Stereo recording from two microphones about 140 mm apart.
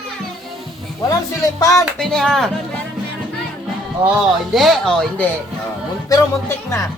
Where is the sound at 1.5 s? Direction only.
25° left (ahead or behind).